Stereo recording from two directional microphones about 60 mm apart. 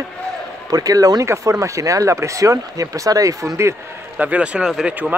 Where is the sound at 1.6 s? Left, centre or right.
Right.